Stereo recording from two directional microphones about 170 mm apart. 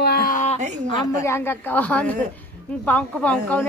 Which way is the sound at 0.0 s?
65° left (ahead or behind).